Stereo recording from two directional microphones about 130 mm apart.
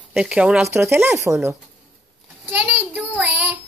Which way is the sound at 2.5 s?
10° right (ahead or behind).